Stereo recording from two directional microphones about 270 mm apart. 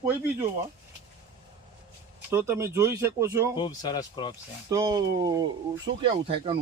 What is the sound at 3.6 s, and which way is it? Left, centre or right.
Speech, centre.